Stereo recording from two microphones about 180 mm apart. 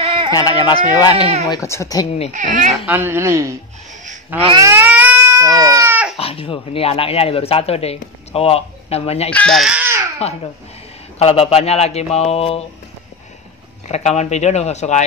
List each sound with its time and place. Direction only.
0.3 s speech: 20° left (ahead or behind)
2.3 s speech: 45° right (ahead or behind)
2.9 s a woman's voice: 10° right (ahead or behind)
4.6 s baby cry: 15° right (ahead or behind)
6.1 s speech: 30° left (ahead or behind)
9.3 s speech: 5° left (ahead or behind); by 10.0 s 10° right (ahead or behind)
11.1 s speech: 35° left (ahead or behind)
13.8 s speech: 40° left (ahead or behind)